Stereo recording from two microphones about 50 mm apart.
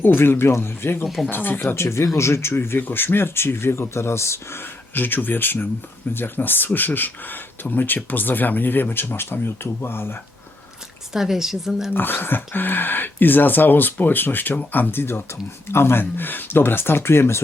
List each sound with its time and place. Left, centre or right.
0.0 s speech: left
1.0 s speech: centre
1.3 s speech: left
1.6 s speech: left
4.9 s speech: left
11.1 s a woman's voice: centre
11.9 s speech: left